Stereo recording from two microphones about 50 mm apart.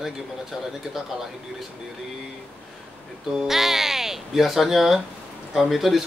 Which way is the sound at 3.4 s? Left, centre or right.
Centre.